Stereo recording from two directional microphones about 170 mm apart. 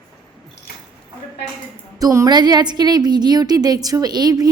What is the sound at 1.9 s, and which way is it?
A woman's voice, 20° right (ahead or behind).